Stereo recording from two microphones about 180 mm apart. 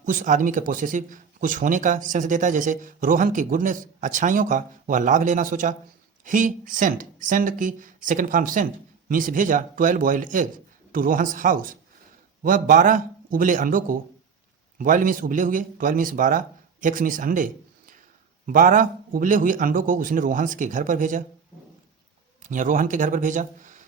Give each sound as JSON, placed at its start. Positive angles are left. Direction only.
{"t": 0.0, "sound": "speech", "side_deg": -45}
{"t": 22.4, "sound": "speech", "side_deg": -45}